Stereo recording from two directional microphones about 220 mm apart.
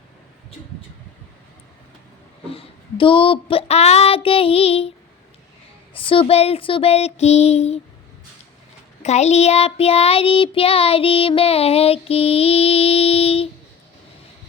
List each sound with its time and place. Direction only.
2.5 s child singing: 25° left (ahead or behind)
5.9 s child singing: 25° left (ahead or behind)
9.0 s child singing: 30° left (ahead or behind)